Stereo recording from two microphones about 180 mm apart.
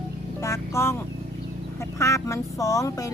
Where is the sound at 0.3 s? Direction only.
15° left (ahead or behind).